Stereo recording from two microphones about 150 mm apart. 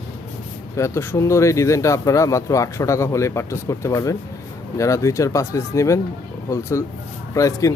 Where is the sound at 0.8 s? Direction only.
20° left (ahead or behind).